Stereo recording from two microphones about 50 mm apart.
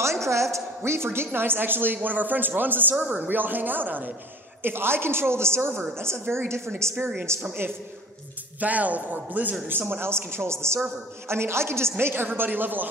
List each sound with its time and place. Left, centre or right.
0.0 s a woman's voice: right
4.6 s a woman's voice: right
6.8 s a woman's voice: right
8.5 s speech: right
9.7 s a woman's voice: right
12.1 s speech: right